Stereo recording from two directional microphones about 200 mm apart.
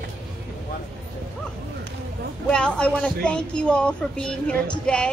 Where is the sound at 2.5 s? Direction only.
5° left (ahead or behind).